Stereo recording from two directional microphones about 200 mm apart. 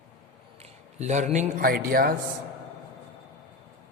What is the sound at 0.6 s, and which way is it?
Speech, 35° right (ahead or behind).